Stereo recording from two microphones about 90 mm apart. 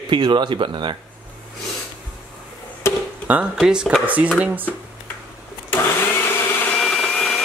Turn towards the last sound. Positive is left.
turn(degrees=5)  # may be behind; listen again after turning